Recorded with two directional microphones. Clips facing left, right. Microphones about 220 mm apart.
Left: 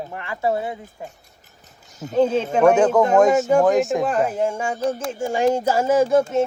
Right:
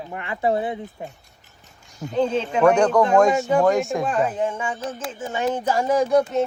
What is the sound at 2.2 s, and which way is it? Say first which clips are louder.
Speech: left 2 dB; 5° left (ahead or behind).